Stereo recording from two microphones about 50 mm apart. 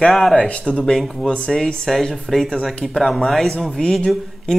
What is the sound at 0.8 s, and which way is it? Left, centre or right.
Speech, centre.